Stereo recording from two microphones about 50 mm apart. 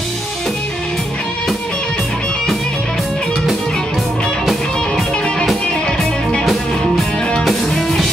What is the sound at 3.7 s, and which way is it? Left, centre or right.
Music, centre.